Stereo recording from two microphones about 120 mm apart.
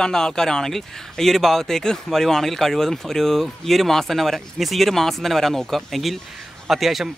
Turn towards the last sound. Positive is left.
turn(degrees=0)  # may be behind; listen again after turning